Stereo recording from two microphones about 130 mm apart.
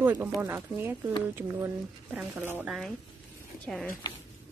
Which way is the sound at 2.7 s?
Centre (ahead or behind).